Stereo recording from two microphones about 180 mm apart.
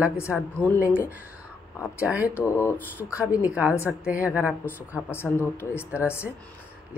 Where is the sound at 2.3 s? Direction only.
15° left (ahead or behind).